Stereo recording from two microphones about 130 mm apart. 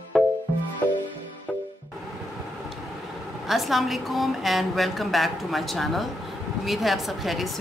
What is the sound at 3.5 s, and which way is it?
A woman's voice, centre (ahead or behind).